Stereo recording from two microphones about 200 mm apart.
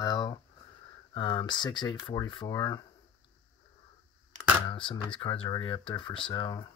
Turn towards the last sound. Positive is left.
turn(degrees=20)  # may be behind; listen again after turning